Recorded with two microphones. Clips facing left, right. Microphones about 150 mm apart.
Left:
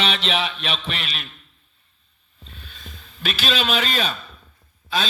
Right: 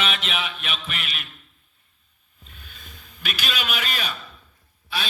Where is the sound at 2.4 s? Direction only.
35° left (ahead or behind).